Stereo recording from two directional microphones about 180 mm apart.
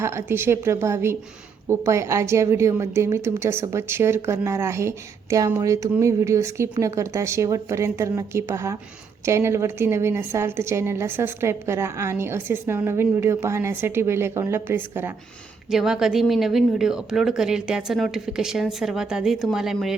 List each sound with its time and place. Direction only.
0.0 s a woman's voice: 15° right (ahead or behind)